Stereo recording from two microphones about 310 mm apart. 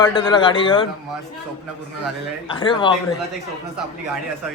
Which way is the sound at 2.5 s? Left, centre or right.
Centre.